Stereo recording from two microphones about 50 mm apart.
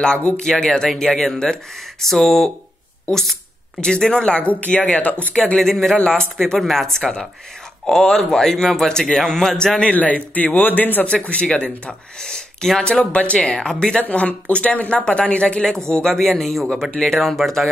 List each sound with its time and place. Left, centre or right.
0.0 s speech: centre
4.5 s a woman's voice: left
5.6 s speech: centre
5.9 s speech: centre
6.3 s speech: centre
9.8 s a man's voice: left
11.2 s a woman's voice: left
12.2 s speech: centre
13.0 s a woman's voice: left
15.9 s speech: centre